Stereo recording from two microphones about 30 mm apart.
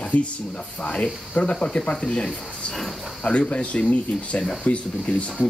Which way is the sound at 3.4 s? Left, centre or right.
Left.